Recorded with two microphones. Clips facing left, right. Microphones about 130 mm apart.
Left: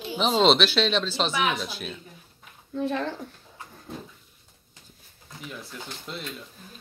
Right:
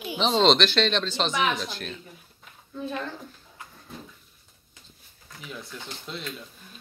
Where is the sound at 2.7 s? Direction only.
70° left (ahead or behind).